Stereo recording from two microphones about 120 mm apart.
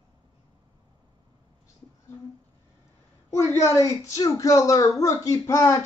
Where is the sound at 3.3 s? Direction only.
25° left (ahead or behind).